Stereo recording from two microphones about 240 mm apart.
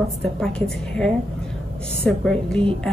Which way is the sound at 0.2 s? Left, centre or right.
Centre.